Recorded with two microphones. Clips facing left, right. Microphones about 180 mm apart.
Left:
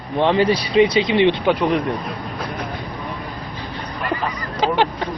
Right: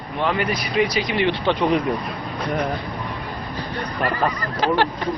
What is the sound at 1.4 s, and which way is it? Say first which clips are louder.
Speech: left 1 dB; centre (ahead or behind).